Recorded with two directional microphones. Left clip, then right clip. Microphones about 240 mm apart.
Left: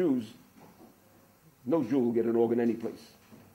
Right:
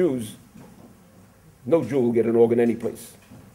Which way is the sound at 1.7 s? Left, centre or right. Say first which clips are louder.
Right 7 dB; centre.